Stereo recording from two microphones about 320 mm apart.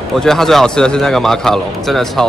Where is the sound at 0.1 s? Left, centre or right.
Centre.